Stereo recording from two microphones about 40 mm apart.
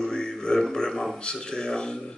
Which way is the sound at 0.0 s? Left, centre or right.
Centre.